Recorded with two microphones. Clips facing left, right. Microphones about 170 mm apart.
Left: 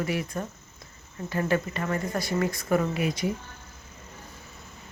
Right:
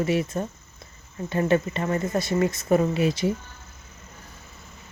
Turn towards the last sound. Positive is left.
turn(degrees=-30)  # may be behind; listen again after turning